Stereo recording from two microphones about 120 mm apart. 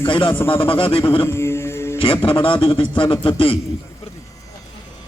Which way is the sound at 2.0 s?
45° left (ahead or behind).